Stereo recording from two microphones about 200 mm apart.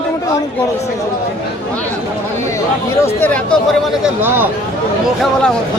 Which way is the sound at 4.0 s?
10° right (ahead or behind).